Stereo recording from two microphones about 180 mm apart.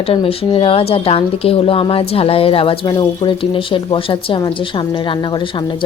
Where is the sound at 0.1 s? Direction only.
30° left (ahead or behind).